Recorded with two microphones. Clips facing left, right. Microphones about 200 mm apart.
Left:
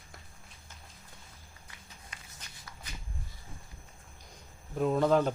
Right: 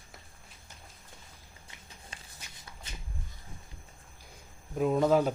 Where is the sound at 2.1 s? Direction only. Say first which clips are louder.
Right 2 dB; 30° right (ahead or behind).